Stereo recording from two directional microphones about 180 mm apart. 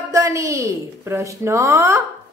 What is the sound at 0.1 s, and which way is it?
Speech, 15° right (ahead or behind).